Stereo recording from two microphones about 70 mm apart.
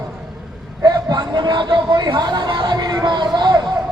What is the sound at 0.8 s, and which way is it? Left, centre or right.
Speech, right.